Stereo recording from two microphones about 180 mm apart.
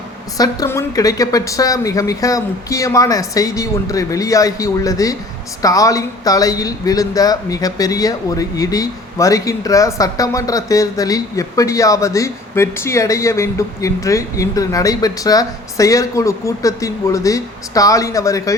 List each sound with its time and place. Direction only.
0.3 s speech: 20° left (ahead or behind)